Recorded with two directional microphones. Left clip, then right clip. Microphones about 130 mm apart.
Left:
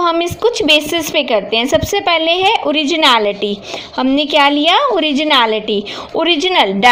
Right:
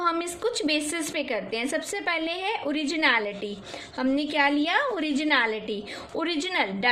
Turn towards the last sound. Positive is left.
turn(degrees=45)  # may be behind; listen again after turning